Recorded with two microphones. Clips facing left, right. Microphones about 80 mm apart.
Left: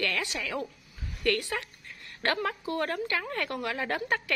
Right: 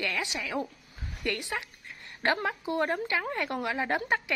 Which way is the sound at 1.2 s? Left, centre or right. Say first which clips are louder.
Left 4 dB; centre.